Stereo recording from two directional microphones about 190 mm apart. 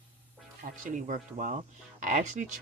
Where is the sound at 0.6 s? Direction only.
45° right (ahead or behind).